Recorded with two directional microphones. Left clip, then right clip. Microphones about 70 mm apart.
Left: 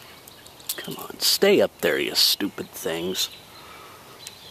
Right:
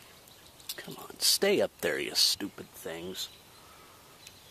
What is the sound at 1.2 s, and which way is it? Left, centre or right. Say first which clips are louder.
Speech: left 8 dB; right.